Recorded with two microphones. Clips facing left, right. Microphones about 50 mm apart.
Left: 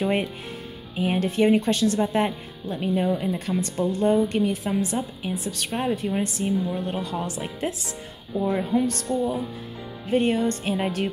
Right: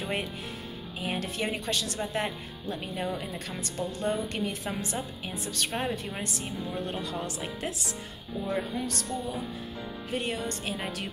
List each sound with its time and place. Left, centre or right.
0.0 s speech: left
2.0 s speech: centre
4.4 s a woman's voice: centre
5.3 s speech: centre
5.6 s a woman's voice: centre; by 7.4 s left
8.5 s speech: centre
10.0 s speech: left